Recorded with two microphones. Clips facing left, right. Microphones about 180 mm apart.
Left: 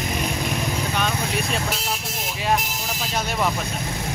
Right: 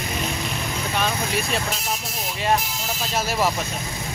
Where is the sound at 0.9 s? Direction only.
Centre (ahead or behind).